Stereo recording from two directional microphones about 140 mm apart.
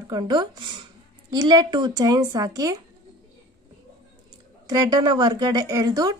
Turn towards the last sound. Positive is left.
turn(degrees=-25)  # may be behind; listen again after turning